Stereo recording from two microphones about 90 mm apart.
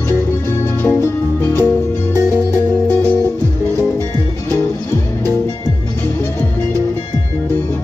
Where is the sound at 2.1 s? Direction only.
35° right (ahead or behind).